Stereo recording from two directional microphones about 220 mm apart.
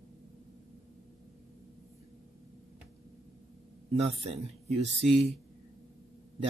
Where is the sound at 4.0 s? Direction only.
30° right (ahead or behind).